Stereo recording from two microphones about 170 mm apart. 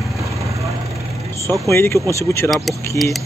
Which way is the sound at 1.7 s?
15° left (ahead or behind).